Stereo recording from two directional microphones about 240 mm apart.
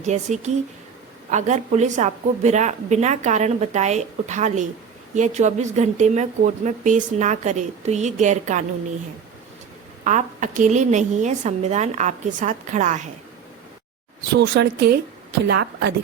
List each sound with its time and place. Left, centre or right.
0.0 s speech: right
10.0 s a woman's voice: right
14.3 s a woman's voice: right